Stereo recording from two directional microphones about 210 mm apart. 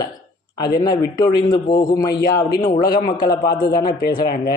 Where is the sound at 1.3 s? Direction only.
20° left (ahead or behind).